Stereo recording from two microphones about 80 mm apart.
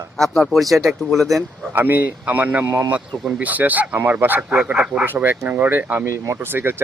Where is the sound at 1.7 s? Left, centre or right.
Right.